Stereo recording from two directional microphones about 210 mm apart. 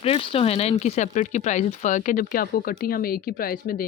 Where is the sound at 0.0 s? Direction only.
25° left (ahead or behind).